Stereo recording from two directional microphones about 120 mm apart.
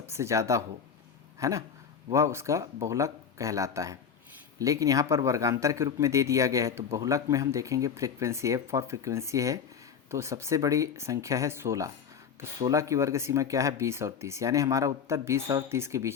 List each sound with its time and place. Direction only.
0.1 s speech: 25° right (ahead or behind)